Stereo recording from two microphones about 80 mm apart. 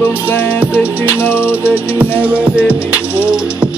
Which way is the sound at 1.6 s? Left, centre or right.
Centre.